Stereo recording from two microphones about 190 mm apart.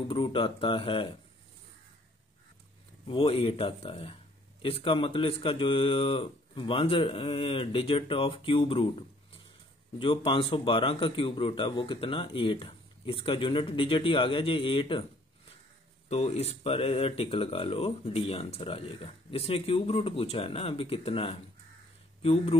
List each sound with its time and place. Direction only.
0.1 s speech: 30° left (ahead or behind)
3.1 s speech: 30° left (ahead or behind)
9.9 s speech: 30° left (ahead or behind)
16.1 s speech: 35° left (ahead or behind)